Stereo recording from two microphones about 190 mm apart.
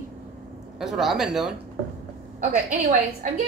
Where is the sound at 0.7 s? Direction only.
Centre (ahead or behind).